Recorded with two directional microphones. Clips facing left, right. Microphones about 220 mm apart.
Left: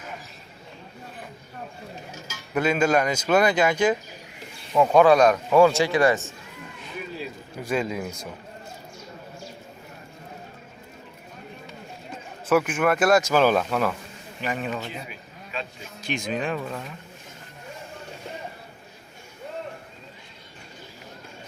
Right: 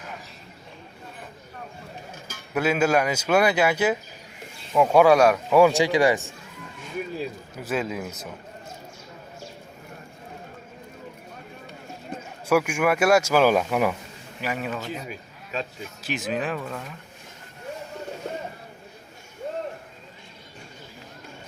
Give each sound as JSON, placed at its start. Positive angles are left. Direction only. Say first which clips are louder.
{"t": 2.1, "sound": "a sound", "louder": "left 1 dB", "side_deg": -55}
{"t": 2.5, "sound": "a man's voice", "louder": "even", "side_deg": -5}
{"t": 7.6, "sound": "speech", "louder": "left 1 dB", "side_deg": -5}
{"t": 12.5, "sound": "a man's voice", "louder": "even", "side_deg": -10}
{"t": 16.0, "sound": "speech", "louder": "even", "side_deg": -5}